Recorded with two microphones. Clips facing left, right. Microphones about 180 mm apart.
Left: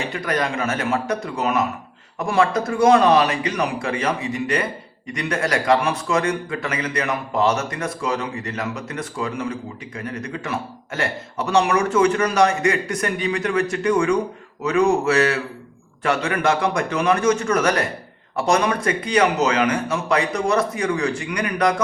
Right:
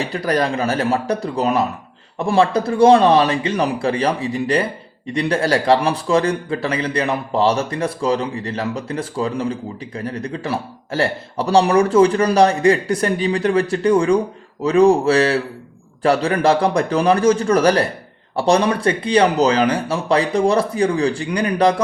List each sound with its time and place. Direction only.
0.0 s speech: 35° right (ahead or behind)